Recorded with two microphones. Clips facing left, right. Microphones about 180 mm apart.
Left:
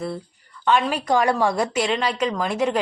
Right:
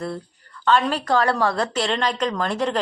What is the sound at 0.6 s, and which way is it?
A woman's voice, 10° left (ahead or behind).